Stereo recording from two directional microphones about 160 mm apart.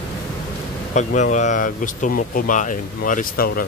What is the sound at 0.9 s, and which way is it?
Speech, 50° left (ahead or behind).